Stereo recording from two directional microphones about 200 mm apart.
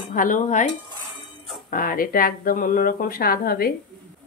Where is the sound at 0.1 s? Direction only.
40° left (ahead or behind).